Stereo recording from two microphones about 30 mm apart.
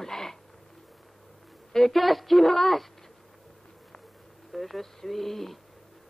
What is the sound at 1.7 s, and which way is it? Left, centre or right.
Speech, centre.